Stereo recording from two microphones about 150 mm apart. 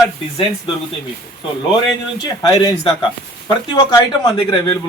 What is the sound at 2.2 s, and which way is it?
Speech, 30° left (ahead or behind).